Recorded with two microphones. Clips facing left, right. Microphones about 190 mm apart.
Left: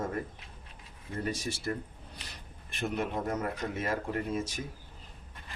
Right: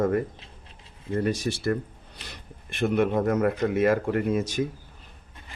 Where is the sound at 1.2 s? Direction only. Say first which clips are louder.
Right 7 dB; 70° right (ahead or behind).